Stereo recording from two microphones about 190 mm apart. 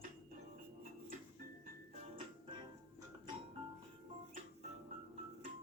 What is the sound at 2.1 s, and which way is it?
Music, 25° right (ahead or behind).